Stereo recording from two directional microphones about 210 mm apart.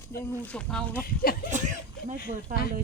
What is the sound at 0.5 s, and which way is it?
Speech, 5° left (ahead or behind).